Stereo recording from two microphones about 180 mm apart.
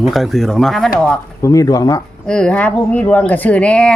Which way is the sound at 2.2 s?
5° left (ahead or behind).